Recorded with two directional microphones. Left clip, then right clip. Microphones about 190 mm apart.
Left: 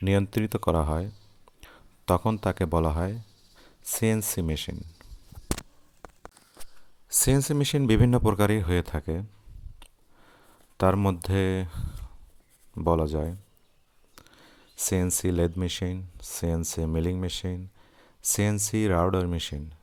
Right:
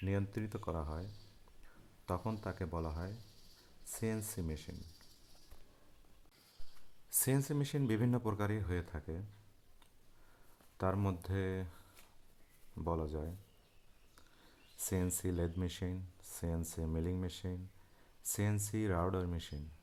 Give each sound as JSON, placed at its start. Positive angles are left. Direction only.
{"t": 0.0, "sound": "speech", "side_deg": 40}
{"t": 7.1, "sound": "speech", "side_deg": 35}
{"t": 10.8, "sound": "speech", "side_deg": 35}